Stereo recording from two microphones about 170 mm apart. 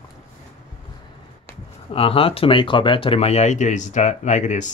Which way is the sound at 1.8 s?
35° left (ahead or behind).